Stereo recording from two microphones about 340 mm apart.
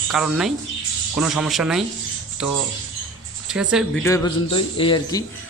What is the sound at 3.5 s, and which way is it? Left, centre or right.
Speech, centre.